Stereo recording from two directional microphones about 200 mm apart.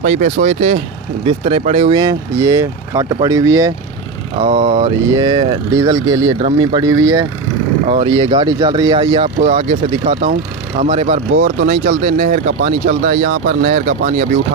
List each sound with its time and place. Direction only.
0.0 s speech: 40° right (ahead or behind)
1.2 s speech: 30° right (ahead or behind)
4.4 s speech: 30° right (ahead or behind)
11.6 s speech: 45° right (ahead or behind)